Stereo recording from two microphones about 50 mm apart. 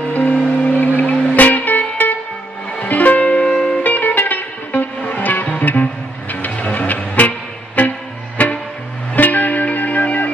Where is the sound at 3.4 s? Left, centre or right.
Centre.